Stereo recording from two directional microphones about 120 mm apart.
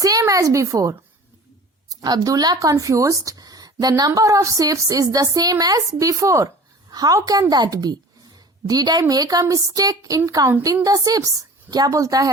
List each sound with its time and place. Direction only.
0.0 s a woman's voice: 30° right (ahead or behind)